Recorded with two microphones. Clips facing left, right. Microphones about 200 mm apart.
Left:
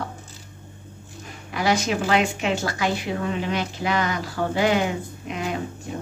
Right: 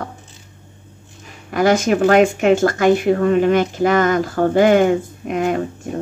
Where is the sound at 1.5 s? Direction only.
50° right (ahead or behind).